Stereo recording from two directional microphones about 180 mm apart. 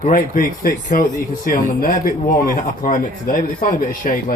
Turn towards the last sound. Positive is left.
turn(degrees=50)  # may be behind; listen again after turning